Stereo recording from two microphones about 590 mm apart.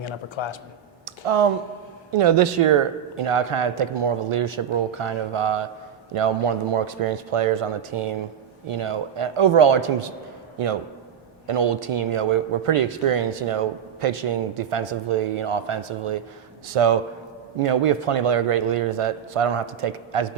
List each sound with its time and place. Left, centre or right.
0.0 s a man's voice: left
1.0 s a sound: right
2.1 s a man's voice: right
11.4 s a man's voice: right